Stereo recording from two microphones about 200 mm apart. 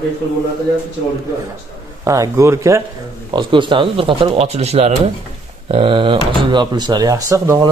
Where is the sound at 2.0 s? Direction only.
15° right (ahead or behind).